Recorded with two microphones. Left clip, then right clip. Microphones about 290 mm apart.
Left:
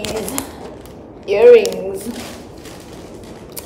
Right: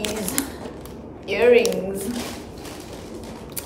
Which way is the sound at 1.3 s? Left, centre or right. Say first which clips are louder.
Left 8 dB; centre.